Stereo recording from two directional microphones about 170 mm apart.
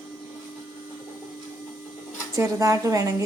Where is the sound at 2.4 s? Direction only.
20° right (ahead or behind).